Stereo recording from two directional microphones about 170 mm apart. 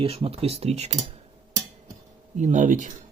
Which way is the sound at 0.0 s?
35° right (ahead or behind).